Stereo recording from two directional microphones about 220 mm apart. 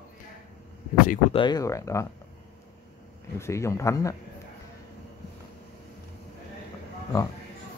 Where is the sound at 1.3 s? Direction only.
20° left (ahead or behind).